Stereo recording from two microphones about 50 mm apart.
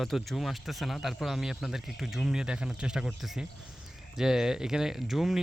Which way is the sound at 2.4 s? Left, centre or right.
Centre.